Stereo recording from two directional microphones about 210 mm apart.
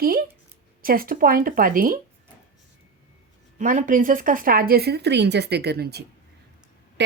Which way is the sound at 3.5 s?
40° right (ahead or behind).